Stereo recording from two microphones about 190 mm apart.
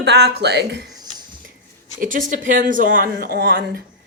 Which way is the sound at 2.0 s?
45° right (ahead or behind).